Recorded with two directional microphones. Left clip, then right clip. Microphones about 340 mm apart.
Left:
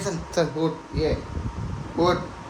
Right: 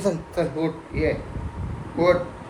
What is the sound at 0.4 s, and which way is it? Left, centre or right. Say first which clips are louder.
Speech: left 4 dB; left.